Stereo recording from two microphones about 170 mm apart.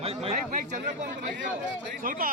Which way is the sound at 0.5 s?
50° right (ahead or behind).